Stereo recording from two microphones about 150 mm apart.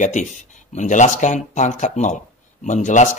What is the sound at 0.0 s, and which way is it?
Speech, 55° left (ahead or behind).